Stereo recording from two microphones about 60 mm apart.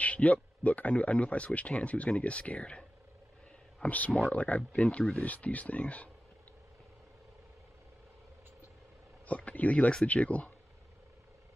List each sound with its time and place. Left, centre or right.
0.0 s speech: left
9.2 s speech: left